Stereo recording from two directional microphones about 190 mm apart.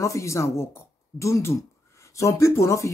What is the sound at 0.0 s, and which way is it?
Speech, 15° left (ahead or behind).